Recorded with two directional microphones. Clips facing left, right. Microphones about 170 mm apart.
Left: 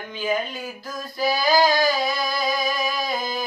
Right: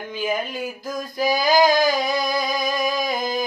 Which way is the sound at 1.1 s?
15° right (ahead or behind).